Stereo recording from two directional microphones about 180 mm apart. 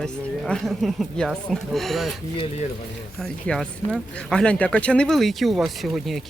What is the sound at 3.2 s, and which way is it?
Speech, centre (ahead or behind).